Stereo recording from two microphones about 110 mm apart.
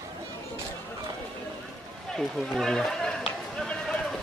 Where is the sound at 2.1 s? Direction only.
5° left (ahead or behind).